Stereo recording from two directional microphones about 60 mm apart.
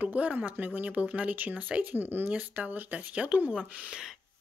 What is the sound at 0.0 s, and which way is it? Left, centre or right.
Speech, right.